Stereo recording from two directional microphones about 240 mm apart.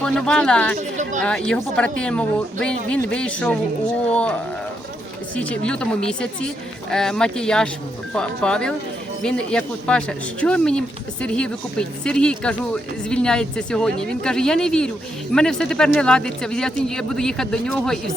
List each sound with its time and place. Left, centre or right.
0.0 s speech: centre
0.8 s speech: right
1.2 s speech: centre
5.4 s speech: centre